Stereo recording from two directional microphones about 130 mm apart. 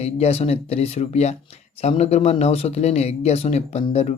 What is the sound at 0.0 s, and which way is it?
Speech, 55° left (ahead or behind).